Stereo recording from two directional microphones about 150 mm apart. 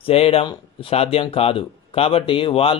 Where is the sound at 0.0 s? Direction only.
40° left (ahead or behind).